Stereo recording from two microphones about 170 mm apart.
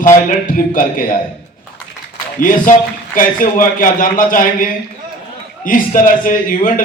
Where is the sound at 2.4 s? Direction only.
50° left (ahead or behind).